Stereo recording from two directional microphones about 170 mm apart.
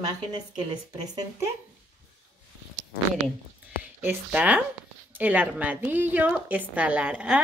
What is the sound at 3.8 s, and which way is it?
A woman's voice, 10° right (ahead or behind).